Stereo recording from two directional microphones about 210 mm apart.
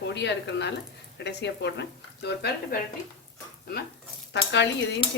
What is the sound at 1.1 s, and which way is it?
Dishes, 55° left (ahead or behind).